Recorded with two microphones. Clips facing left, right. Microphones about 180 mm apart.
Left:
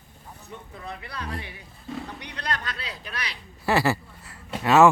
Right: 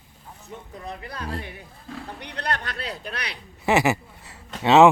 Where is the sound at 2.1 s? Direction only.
60° right (ahead or behind).